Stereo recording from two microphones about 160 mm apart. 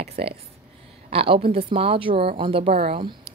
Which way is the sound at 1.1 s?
35° right (ahead or behind).